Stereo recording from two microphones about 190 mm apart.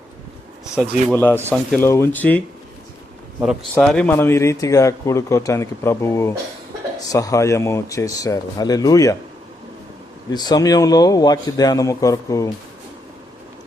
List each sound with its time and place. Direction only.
1.1 s speech: 10° left (ahead or behind)
3.4 s speech: centre (ahead or behind); by 9.1 s 20° left (ahead or behind)
10.3 s a man's voice: 20° left (ahead or behind)